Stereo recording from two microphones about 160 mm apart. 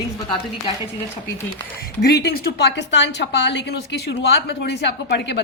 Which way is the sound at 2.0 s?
80° left.